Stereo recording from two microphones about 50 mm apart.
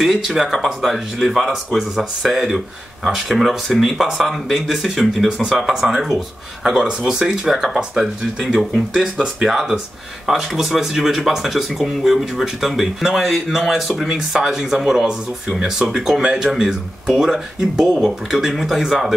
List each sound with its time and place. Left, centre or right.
0.0 s speech: centre